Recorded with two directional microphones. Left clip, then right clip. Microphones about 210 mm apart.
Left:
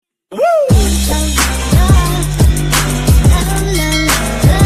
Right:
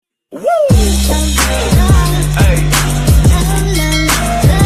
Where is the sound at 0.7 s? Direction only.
Centre (ahead or behind).